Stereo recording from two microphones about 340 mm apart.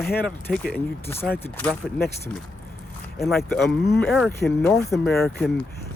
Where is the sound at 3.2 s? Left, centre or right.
Centre.